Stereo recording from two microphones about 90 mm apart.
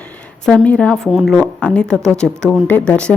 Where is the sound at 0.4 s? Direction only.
10° left (ahead or behind).